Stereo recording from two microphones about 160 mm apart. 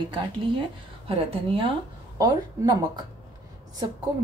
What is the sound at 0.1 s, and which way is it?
Speech, 35° right (ahead or behind).